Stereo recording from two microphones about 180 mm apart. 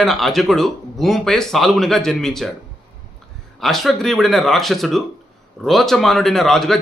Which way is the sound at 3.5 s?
Centre (ahead or behind).